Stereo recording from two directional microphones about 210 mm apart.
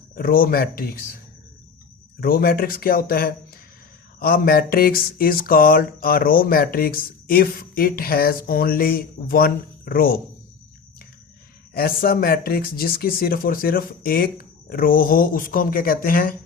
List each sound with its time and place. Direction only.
0.2 s speech: 45° left (ahead or behind)
2.2 s speech: 45° left (ahead or behind)
11.7 s speech: 45° left (ahead or behind)